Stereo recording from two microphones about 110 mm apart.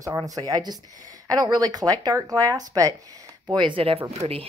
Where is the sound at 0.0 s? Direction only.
30° right (ahead or behind).